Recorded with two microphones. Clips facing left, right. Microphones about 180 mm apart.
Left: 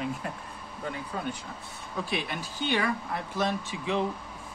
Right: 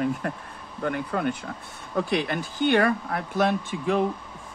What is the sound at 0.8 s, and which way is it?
Speech, 65° right (ahead or behind).